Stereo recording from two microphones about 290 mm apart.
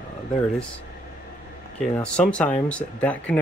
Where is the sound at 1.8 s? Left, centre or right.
Centre.